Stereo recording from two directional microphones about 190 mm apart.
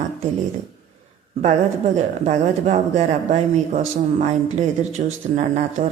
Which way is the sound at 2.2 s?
35° right (ahead or behind).